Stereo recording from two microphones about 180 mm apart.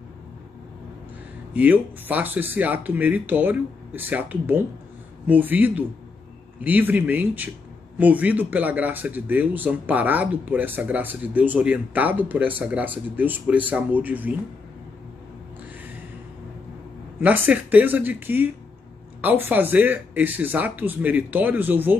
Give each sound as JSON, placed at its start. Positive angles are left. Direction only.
{"t": 1.5, "sound": "speech", "side_deg": -10}
{"t": 17.2, "sound": "speech", "side_deg": -10}